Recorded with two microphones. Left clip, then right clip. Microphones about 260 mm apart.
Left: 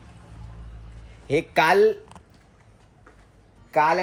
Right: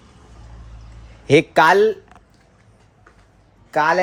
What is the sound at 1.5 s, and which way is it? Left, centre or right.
Speech, centre.